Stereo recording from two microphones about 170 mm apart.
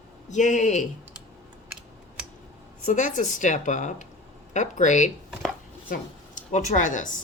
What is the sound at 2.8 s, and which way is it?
Speech, 45° left (ahead or behind).